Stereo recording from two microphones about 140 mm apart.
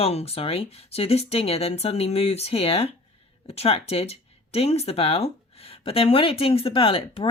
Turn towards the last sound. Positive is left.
turn(degrees=40)  # may be behind; listen again after turning